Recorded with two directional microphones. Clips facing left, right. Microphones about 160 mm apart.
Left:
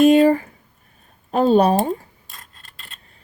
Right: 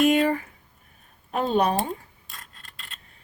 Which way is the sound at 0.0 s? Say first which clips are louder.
Left 8 dB; 30° left (ahead or behind).